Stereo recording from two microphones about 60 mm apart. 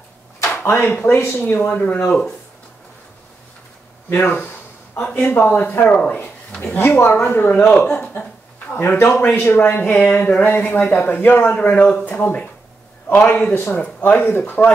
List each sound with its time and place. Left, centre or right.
0.5 s a sound: left
1.0 s speech: left
4.1 s speech: left
5.0 s a man's voice: left
6.8 s speech: left
7.7 s speech: centre
8.7 s a man's voice: left